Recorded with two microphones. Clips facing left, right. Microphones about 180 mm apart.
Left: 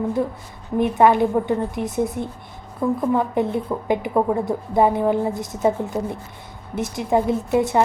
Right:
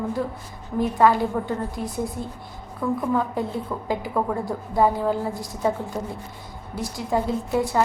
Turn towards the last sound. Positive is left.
turn(degrees=20)  # may be behind; listen again after turning